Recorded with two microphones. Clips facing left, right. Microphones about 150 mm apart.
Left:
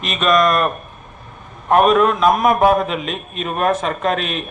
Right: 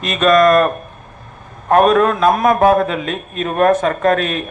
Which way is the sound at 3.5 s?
50° right (ahead or behind).